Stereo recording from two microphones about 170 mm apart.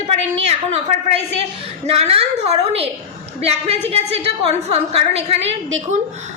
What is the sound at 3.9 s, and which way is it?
A woman's voice, 35° right (ahead or behind).